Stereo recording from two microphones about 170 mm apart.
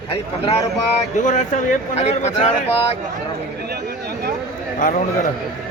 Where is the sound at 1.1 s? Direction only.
45° left (ahead or behind).